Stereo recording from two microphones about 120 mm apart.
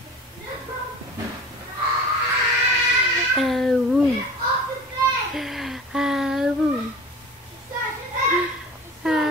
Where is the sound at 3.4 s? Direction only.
Centre (ahead or behind).